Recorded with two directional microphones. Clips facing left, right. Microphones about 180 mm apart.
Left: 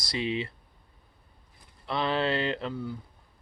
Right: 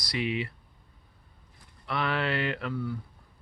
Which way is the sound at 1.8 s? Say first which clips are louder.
Left 2 dB; 25° left (ahead or behind).